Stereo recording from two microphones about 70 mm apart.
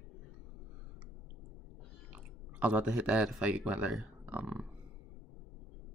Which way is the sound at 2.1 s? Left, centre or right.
Centre.